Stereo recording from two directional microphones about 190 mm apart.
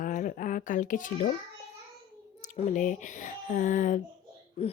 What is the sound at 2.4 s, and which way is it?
A woman's voice, 40° left (ahead or behind).